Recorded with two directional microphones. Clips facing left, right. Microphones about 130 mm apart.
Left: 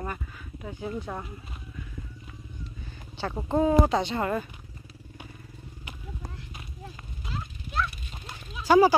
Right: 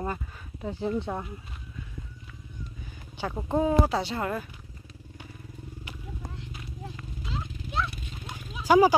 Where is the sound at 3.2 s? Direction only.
10° right (ahead or behind).